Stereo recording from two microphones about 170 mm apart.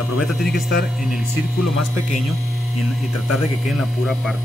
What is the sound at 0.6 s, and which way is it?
Speech, 65° left (ahead or behind).